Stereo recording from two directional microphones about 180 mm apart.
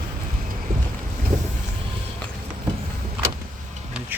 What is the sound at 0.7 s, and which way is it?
Boat, 50° right (ahead or behind).